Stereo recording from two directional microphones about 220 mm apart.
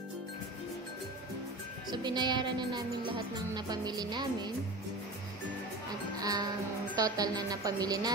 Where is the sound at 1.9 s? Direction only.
20° right (ahead or behind).